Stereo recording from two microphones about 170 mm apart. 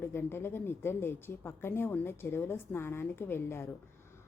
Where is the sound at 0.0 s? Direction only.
15° left (ahead or behind).